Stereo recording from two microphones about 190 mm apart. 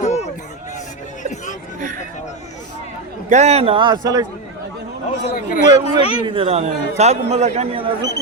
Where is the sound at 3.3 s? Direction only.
35° right (ahead or behind); by 4.2 s 20° right (ahead or behind).